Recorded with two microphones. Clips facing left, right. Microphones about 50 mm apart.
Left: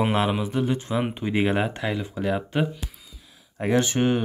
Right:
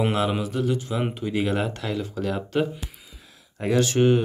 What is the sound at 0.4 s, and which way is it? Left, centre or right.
Speech, left.